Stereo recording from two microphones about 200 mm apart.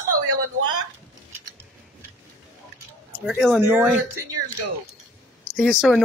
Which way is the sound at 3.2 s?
Centre (ahead or behind).